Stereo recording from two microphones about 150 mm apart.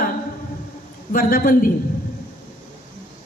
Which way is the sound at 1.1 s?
70° left (ahead or behind).